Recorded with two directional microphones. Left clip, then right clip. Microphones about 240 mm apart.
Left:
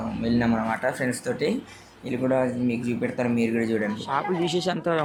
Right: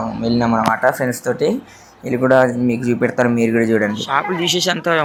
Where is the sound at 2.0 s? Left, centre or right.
Centre.